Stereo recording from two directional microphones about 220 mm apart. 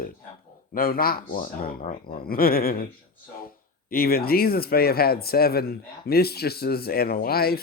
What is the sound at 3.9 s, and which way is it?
Speech, 45° left (ahead or behind).